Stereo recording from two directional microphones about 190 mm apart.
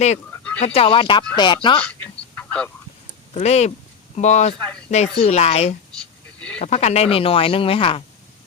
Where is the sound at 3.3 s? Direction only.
35° left (ahead or behind).